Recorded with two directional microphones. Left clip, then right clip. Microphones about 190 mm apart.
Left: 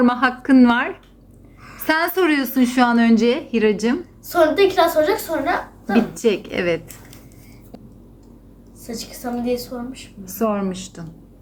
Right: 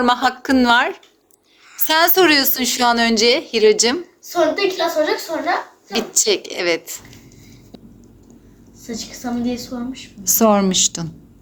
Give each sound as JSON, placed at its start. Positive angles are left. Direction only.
{"t": 0.0, "sound": "a woman's voice", "side_deg": -20}
{"t": 4.3, "sound": "a woman's voice", "side_deg": 10}
{"t": 5.9, "sound": "a woman's voice", "side_deg": -25}
{"t": 9.2, "sound": "a woman's voice", "side_deg": 10}
{"t": 10.2, "sound": "a woman's voice", "side_deg": -40}